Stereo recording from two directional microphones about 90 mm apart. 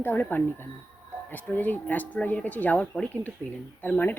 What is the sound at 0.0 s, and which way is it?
Speech, 20° left (ahead or behind).